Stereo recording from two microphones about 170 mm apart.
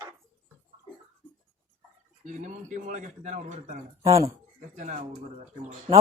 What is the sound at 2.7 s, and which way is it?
Speech, 45° right (ahead or behind).